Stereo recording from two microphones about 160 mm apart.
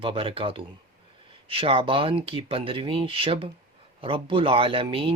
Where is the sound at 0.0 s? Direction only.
35° right (ahead or behind).